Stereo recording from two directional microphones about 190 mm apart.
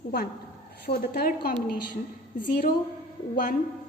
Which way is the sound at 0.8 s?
55° left (ahead or behind).